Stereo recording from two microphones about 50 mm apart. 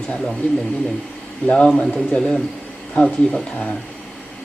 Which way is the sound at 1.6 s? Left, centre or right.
Centre.